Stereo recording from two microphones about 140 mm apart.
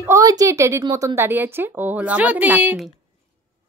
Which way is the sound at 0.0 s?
25° right (ahead or behind).